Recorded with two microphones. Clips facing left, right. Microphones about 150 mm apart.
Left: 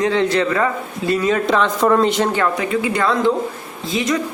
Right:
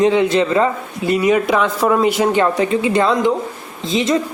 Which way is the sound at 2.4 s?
30° right (ahead or behind).